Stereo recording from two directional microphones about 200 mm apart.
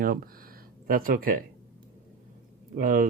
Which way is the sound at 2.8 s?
45° right (ahead or behind).